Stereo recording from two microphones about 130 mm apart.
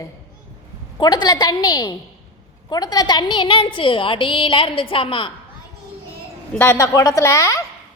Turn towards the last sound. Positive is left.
turn(degrees=20)  # may be behind; listen again after turning